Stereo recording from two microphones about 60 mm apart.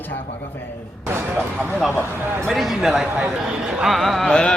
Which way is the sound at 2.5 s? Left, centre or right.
Centre.